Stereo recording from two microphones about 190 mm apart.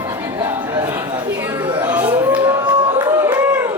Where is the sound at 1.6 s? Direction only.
25° right (ahead or behind).